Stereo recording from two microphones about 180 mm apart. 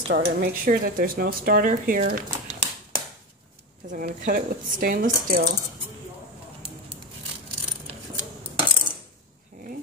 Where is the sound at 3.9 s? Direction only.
50° right (ahead or behind).